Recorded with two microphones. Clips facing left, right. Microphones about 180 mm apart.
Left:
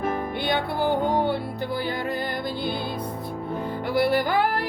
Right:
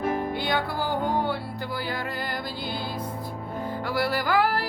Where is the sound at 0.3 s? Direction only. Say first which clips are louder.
Left 2 dB; 20° left (ahead or behind).